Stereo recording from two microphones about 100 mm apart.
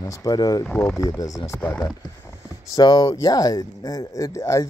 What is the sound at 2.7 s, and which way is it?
Speech, 45° left (ahead or behind).